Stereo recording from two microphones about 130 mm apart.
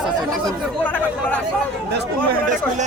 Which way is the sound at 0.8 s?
10° left (ahead or behind).